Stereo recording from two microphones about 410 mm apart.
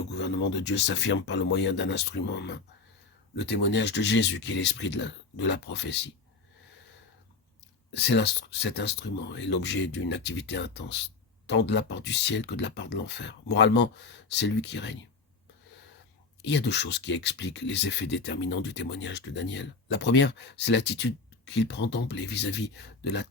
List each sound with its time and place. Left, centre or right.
0.1 s speech: left
7.9 s speech: left
16.4 s speech: left